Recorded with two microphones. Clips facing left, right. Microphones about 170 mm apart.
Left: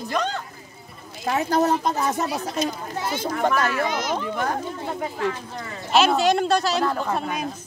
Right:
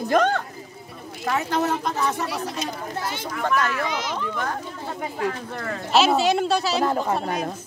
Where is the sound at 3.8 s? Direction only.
45° left (ahead or behind).